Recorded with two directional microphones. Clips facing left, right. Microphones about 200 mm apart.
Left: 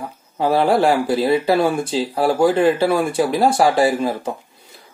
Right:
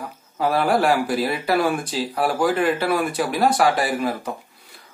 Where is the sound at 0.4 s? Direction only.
25° left (ahead or behind).